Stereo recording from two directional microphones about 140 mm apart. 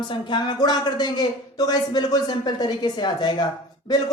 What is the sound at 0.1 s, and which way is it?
A woman's voice, 30° left (ahead or behind).